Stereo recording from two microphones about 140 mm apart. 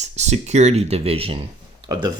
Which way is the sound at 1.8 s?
30° right (ahead or behind).